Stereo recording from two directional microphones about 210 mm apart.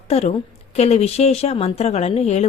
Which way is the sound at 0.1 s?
30° left (ahead or behind).